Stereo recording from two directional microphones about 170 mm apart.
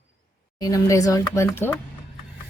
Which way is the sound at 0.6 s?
20° left (ahead or behind).